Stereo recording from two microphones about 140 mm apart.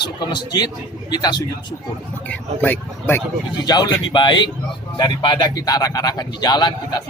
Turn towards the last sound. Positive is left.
turn(degrees=30)  # may be behind; listen again after turning